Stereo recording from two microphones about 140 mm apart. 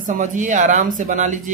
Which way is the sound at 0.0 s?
65° right (ahead or behind).